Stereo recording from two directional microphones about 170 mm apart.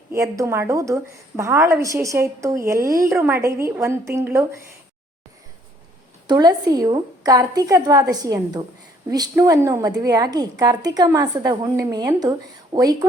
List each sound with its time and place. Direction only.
0.1 s a woman's voice: 15° right (ahead or behind)
6.2 s a woman's voice: 25° right (ahead or behind)